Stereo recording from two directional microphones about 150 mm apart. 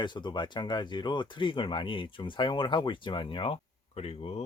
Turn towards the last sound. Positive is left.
turn(degrees=45)  # may be behind; listen again after turning